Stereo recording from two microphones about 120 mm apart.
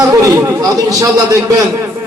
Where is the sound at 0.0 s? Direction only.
30° right (ahead or behind).